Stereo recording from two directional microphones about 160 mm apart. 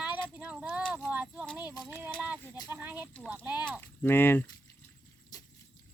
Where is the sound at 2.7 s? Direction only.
10° right (ahead or behind).